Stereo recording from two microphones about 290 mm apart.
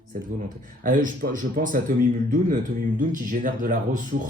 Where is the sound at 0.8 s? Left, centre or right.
Right.